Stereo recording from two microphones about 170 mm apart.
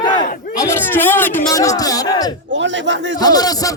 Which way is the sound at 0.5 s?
15° left (ahead or behind).